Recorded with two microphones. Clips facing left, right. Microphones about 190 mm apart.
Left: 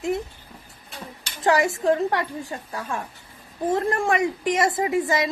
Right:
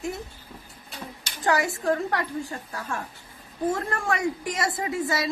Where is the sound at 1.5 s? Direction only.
20° left (ahead or behind).